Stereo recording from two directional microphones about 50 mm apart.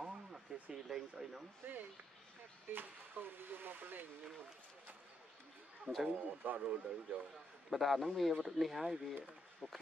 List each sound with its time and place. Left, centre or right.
0.0 s a sound: centre
0.8 s speech: centre
1.6 s speech: right
6.0 s speech: right
7.7 s speech: centre